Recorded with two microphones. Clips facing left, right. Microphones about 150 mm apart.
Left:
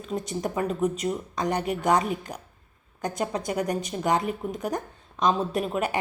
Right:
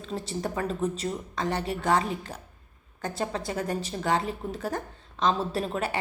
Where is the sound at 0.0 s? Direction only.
15° left (ahead or behind).